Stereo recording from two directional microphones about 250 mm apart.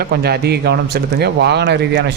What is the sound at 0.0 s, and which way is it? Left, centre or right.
Speech, right.